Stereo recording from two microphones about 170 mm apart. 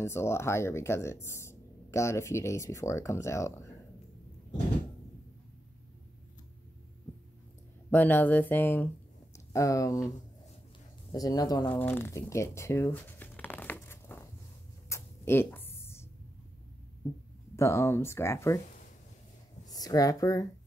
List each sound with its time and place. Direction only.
0.0 s speech: 15° left (ahead or behind)
7.9 s speech: 10° left (ahead or behind)
11.7 s crumpling: 10° left (ahead or behind)
14.9 s a sound: 15° left (ahead or behind)
17.6 s speech: 15° left (ahead or behind)
19.6 s speech: 20° left (ahead or behind)